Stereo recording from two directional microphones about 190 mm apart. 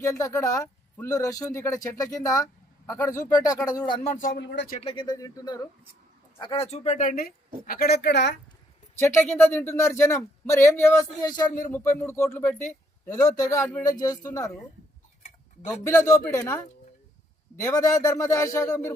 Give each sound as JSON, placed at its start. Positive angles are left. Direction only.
{"t": 0.0, "sound": "speech", "side_deg": 15}
{"t": 4.0, "sound": "speech", "side_deg": 40}
{"t": 4.4, "sound": "speech", "side_deg": 65}
{"t": 4.8, "sound": "speech", "side_deg": 25}
{"t": 9.0, "sound": "speech", "side_deg": 15}
{"t": 15.9, "sound": "speech", "side_deg": 15}